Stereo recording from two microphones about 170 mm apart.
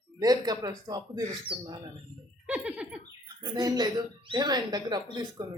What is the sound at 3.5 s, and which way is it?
Speech, 25° right (ahead or behind).